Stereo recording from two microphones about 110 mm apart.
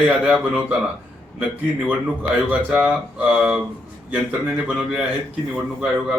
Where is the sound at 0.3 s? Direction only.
5° right (ahead or behind).